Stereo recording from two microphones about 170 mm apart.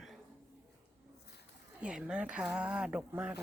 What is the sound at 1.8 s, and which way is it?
Speech, 5° right (ahead or behind).